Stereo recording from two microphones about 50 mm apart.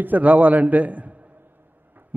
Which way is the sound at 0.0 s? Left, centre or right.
Right.